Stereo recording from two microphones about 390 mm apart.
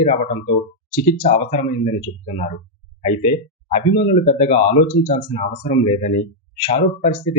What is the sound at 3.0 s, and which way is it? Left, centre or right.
Speech, centre.